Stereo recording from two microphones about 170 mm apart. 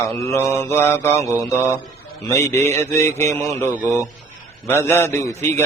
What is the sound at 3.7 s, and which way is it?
Speech, 15° right (ahead or behind).